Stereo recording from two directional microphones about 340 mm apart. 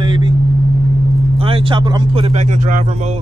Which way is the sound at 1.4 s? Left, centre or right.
Centre.